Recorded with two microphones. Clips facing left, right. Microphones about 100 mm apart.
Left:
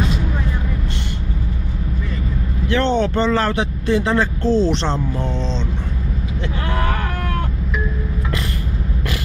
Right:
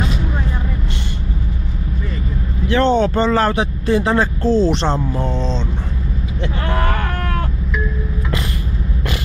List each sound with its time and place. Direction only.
2.7 s speech: 5° right (ahead or behind)
3.2 s speech: 40° right (ahead or behind)
4.4 s speech: 5° right (ahead or behind)
5.3 s speech: 40° right (ahead or behind)